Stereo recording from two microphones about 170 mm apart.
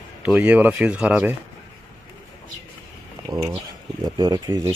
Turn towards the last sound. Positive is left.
turn(degrees=-25)  # may be behind; listen again after turning